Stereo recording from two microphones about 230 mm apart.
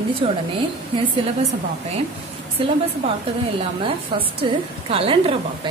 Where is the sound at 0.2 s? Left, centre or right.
Right.